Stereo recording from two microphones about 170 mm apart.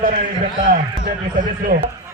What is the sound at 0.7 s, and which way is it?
Speech, 55° right (ahead or behind).